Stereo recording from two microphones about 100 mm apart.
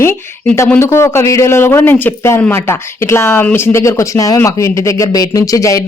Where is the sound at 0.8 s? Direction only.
25° left (ahead or behind).